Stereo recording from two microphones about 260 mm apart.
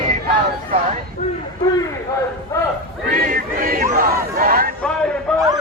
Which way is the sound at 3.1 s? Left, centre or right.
Right.